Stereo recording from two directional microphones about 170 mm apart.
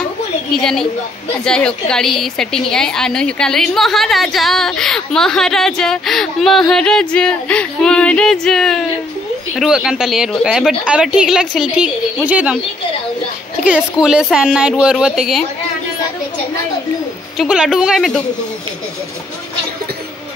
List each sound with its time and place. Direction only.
0.5 s a woman's voice: 5° left (ahead or behind)
13.7 s a woman's voice: 5° right (ahead or behind)
17.4 s a woman's voice: 5° right (ahead or behind)